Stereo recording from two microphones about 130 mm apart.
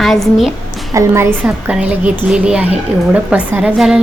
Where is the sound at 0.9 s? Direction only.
25° right (ahead or behind).